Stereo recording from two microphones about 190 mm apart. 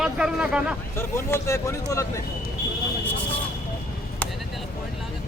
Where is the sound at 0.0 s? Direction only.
5° right (ahead or behind).